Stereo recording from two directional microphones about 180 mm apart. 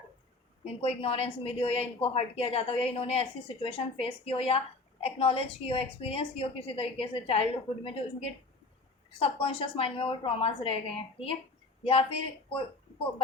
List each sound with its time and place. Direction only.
0.6 s a woman's voice: 35° left (ahead or behind)